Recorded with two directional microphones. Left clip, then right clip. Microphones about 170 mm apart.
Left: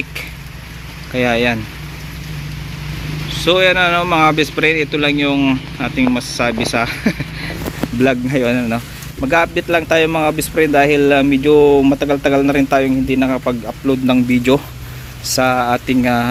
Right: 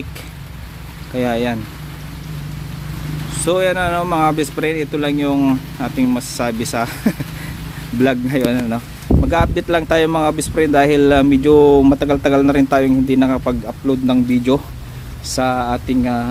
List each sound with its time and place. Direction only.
1.1 s speech: 5° right (ahead or behind)
3.4 s speech: 5° right (ahead or behind)
9.6 s speech: 20° right (ahead or behind); by 16.3 s 5° left (ahead or behind)